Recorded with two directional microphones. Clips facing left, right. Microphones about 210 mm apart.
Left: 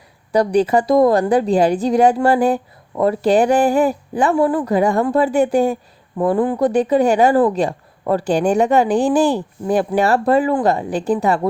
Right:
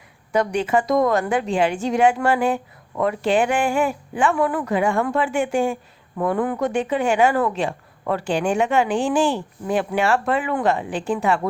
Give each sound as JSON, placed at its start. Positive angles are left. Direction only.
{"t": 0.3, "sound": "a woman's voice", "side_deg": 35}